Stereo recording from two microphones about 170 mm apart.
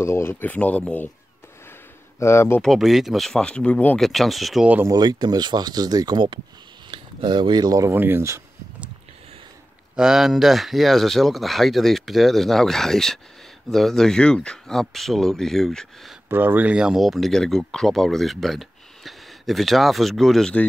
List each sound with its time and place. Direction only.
0.0 s speech: 15° left (ahead or behind)
2.1 s speech: 15° left (ahead or behind)
2.6 s speech: centre (ahead or behind)
4.9 s speech: 25° right (ahead or behind)
9.9 s speech: 5° right (ahead or behind)
16.3 s speech: 10° right (ahead or behind)